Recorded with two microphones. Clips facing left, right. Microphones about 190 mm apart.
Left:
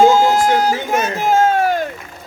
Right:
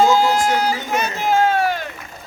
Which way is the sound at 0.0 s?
45° left (ahead or behind).